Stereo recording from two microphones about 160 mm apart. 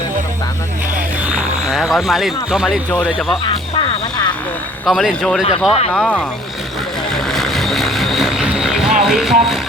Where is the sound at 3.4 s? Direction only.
30° left (ahead or behind).